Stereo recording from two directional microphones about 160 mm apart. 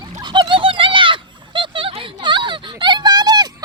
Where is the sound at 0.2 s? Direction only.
25° right (ahead or behind).